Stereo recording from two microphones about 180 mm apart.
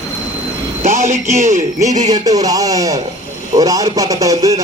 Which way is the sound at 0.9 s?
40° right (ahead or behind).